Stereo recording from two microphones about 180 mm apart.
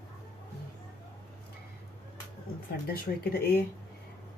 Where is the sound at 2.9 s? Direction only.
55° left (ahead or behind).